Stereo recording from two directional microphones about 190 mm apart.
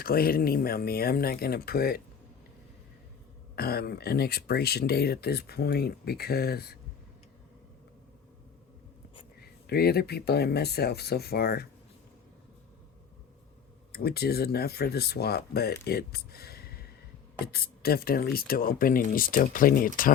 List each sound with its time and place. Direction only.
0.0 s speech: 50° left (ahead or behind)
3.5 s speech: 55° left (ahead or behind)
9.4 s speech: 55° left (ahead or behind)
13.9 s speech: 55° left (ahead or behind)